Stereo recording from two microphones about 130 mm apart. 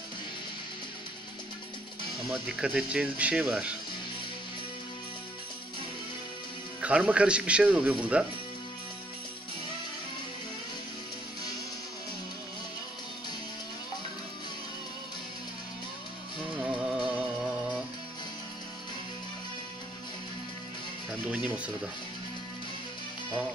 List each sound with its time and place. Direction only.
2.2 s speech: 5° right (ahead or behind)
6.8 s speech: 10° right (ahead or behind)
16.5 s music: 5° right (ahead or behind)
21.1 s music: 10° right (ahead or behind)